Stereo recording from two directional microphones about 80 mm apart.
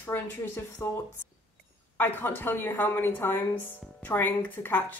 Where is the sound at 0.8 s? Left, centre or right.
Left.